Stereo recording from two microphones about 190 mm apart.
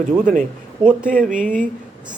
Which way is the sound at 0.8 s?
5° right (ahead or behind).